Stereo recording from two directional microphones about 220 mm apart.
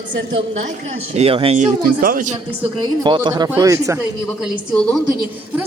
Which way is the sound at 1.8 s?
40° right (ahead or behind).